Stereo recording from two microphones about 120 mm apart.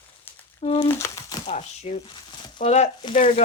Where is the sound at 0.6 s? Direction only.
65° left (ahead or behind).